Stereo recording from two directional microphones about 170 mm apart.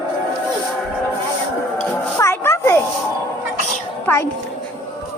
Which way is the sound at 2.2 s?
15° left (ahead or behind).